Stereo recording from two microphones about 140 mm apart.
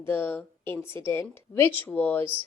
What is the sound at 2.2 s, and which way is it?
Speech, 40° right (ahead or behind).